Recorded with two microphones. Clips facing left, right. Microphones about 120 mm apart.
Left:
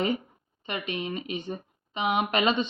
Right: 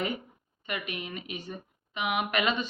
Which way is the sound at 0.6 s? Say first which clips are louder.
Left 4 dB; 25° left (ahead or behind).